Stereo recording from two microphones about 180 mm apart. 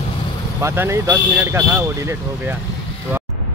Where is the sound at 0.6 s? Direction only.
15° right (ahead or behind).